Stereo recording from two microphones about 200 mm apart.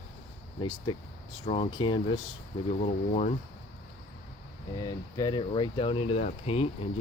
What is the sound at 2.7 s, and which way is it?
Speech, 35° left (ahead or behind).